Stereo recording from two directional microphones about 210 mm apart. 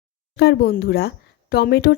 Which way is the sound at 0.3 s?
50° left (ahead or behind).